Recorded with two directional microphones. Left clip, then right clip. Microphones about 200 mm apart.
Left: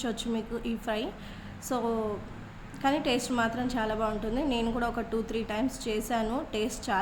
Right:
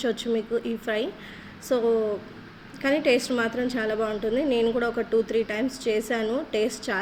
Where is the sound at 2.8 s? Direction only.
5° left (ahead or behind).